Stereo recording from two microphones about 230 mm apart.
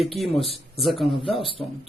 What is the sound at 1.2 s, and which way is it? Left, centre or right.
Speech, left.